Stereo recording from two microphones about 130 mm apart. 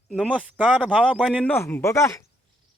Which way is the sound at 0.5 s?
5° left (ahead or behind).